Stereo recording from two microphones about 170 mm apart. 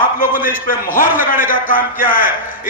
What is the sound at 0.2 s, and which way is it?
A man's voice, 50° left (ahead or behind).